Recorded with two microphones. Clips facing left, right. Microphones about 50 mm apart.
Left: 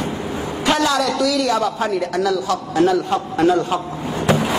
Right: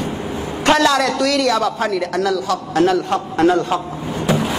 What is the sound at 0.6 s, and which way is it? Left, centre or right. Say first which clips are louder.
A man's voice: right 4 dB; right.